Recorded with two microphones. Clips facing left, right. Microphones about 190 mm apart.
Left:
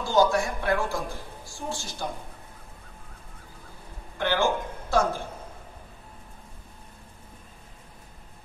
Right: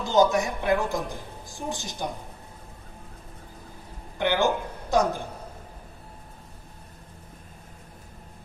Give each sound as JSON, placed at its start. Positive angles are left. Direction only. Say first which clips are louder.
{"t": 0.0, "sound": "a woman's voice", "louder": "right 1 dB", "side_deg": -20}
{"t": 4.2, "sound": "speech", "louder": "right 1 dB", "side_deg": -15}